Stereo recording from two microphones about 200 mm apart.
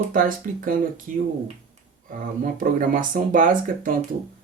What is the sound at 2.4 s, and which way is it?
Speech, 45° right (ahead or behind).